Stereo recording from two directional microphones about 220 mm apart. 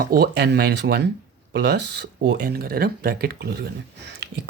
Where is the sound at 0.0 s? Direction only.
45° right (ahead or behind).